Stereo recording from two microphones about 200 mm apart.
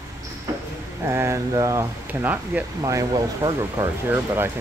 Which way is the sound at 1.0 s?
15° right (ahead or behind).